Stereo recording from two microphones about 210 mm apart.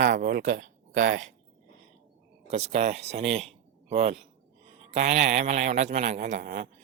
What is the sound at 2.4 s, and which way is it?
A man's voice, 30° right (ahead or behind).